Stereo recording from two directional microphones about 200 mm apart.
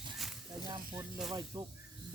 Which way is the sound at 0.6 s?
15° right (ahead or behind).